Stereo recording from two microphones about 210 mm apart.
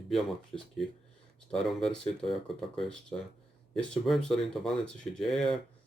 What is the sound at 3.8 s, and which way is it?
Speech, centre (ahead or behind).